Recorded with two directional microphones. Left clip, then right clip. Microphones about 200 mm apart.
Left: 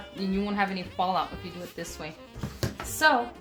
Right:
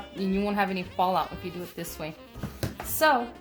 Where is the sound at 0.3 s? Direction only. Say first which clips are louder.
Right 1 dB; 35° right (ahead or behind).